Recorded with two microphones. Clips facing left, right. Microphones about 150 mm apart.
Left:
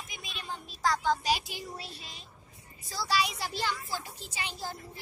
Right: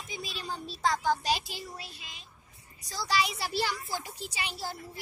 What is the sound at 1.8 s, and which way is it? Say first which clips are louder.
Child singing: left 2 dB; 30° left (ahead or behind).